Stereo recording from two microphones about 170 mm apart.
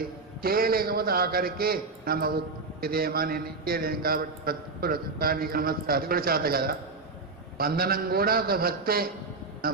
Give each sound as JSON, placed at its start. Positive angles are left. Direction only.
{"t": 0.4, "sound": "a man's voice", "side_deg": -60}